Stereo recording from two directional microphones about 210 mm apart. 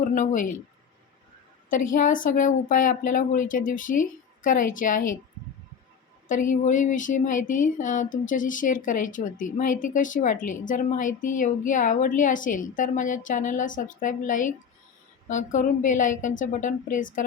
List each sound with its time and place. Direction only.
0.0 s a woman's voice: 35° left (ahead or behind)
1.7 s speech: 40° left (ahead or behind)
6.2 s speech: 35° left (ahead or behind)